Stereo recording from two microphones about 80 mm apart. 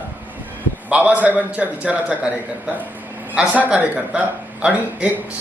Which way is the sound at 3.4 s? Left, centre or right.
Centre.